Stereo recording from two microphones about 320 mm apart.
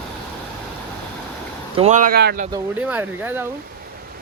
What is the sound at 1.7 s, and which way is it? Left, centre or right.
Speech, right.